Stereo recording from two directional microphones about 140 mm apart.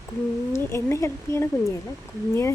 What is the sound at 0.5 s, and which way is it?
Speech, 20° left (ahead or behind).